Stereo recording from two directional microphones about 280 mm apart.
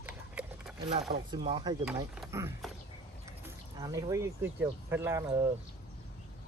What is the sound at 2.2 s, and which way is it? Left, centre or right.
Speech, centre.